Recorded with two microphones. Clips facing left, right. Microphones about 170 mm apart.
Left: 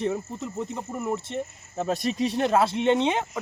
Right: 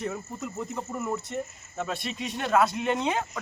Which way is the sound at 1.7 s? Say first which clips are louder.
Left 7 dB; 40° left (ahead or behind).